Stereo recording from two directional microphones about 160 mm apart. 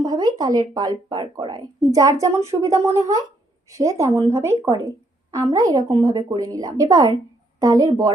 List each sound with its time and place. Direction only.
0.0 s speech: 25° right (ahead or behind)